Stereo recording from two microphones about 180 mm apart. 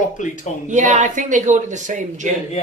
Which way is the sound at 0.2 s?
45° left (ahead or behind).